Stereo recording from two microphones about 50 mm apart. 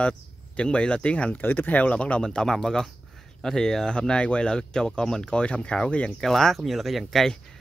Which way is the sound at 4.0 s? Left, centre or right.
Left.